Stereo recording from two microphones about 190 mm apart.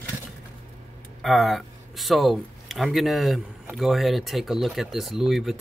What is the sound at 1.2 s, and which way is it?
Speech, centre (ahead or behind).